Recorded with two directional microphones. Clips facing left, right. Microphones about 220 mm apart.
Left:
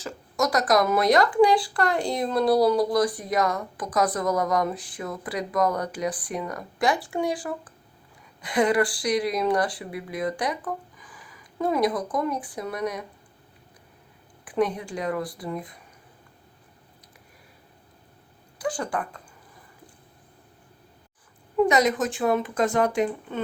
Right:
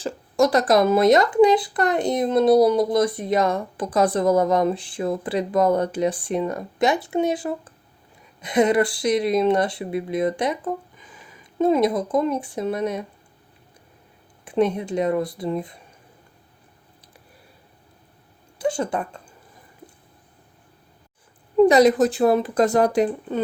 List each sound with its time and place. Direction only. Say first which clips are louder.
0.0 s speech: right 7 dB; 30° right (ahead or behind)
14.4 s speech: right 4 dB; 25° right (ahead or behind)
18.6 s speech: right 5 dB; 25° right (ahead or behind)
21.7 s speech: right 7 dB; 35° right (ahead or behind)